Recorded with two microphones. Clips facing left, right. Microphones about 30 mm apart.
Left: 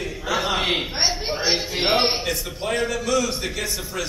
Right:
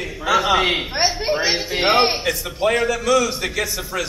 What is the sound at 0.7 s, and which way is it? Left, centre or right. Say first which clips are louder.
A man's voice: right 2 dB; centre.